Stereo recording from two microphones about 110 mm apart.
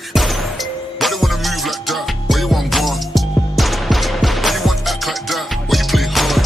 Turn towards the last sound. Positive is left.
turn(degrees=0)  # may be behind; listen again after turning